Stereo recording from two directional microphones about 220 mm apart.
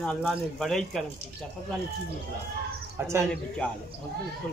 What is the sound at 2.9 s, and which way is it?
Speech, 10° right (ahead or behind).